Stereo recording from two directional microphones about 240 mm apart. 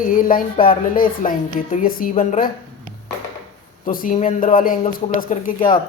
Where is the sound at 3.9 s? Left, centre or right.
Left.